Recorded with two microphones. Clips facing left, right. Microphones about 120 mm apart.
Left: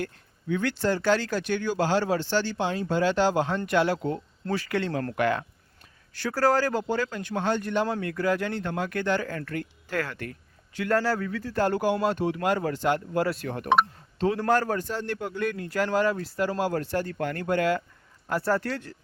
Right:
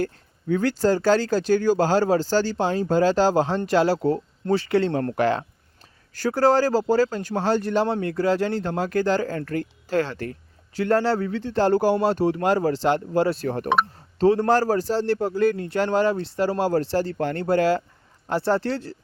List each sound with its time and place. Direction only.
0.0 s speech: 40° right (ahead or behind)